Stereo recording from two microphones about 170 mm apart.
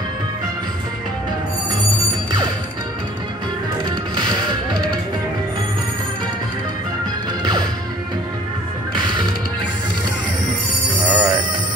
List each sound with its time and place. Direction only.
8.9 s music: 25° right (ahead or behind)
11.1 s music: 10° right (ahead or behind)